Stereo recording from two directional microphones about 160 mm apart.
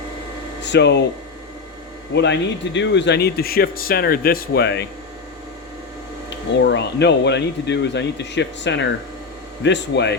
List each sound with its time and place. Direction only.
0.6 s speech: 90° left
2.1 s speech: 90° left
6.3 s speech: 90° left